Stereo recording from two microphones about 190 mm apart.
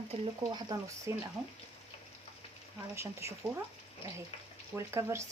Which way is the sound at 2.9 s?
15° right (ahead or behind).